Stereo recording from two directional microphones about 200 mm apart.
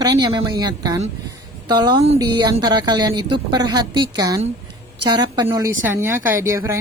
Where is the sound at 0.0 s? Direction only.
20° right (ahead or behind).